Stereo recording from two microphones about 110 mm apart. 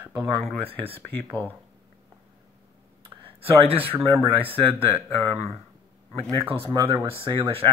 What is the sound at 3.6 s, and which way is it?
Speech, 60° right (ahead or behind).